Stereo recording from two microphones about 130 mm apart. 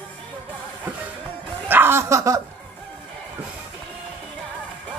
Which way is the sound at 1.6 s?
15° right (ahead or behind).